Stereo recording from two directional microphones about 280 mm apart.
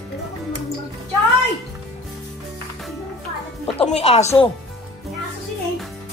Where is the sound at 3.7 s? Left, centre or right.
Left.